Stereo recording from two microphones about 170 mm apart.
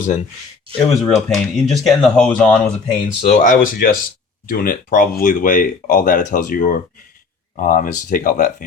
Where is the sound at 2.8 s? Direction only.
40° left (ahead or behind).